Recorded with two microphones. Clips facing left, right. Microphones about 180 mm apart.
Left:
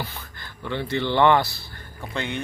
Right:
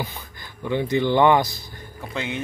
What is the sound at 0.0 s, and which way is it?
Speech, 15° right (ahead or behind).